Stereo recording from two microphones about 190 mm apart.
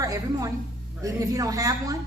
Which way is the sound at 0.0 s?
15° right (ahead or behind).